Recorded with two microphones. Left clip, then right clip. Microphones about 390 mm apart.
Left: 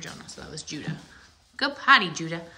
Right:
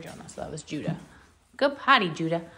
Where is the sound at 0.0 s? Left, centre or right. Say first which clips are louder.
Right 2 dB; centre.